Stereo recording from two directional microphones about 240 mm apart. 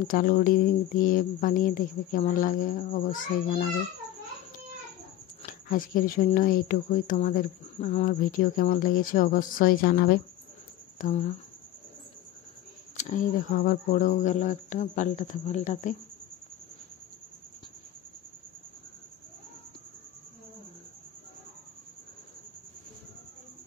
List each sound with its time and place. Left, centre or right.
0.0 s speech: left
5.4 s speech: left
12.9 s speech: left